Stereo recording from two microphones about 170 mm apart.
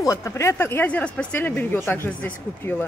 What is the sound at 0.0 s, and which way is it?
A woman's voice, 20° left (ahead or behind).